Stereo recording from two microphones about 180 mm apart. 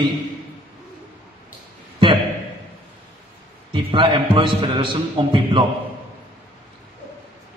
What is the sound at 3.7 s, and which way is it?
A man's voice, 30° right (ahead or behind).